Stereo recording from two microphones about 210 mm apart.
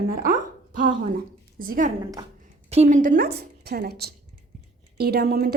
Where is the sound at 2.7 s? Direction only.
35° right (ahead or behind).